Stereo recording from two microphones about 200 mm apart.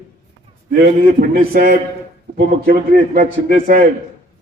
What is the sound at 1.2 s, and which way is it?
A man's voice, 50° right (ahead or behind).